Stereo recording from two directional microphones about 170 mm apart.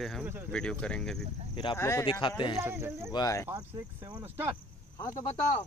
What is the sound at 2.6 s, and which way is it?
Speech, 15° right (ahead or behind).